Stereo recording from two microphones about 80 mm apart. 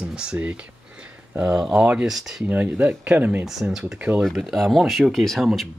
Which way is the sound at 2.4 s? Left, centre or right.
Centre.